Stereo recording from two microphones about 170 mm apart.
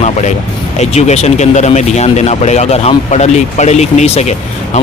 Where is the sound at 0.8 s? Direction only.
40° left (ahead or behind).